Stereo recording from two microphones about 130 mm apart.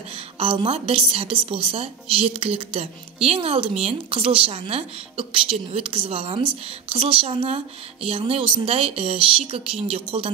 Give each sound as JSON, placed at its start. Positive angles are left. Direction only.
{"t": 0.4, "sound": "a woman's voice", "side_deg": -45}